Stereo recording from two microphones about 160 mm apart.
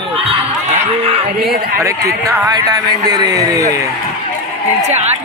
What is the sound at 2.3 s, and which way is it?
A man's voice, 20° right (ahead or behind).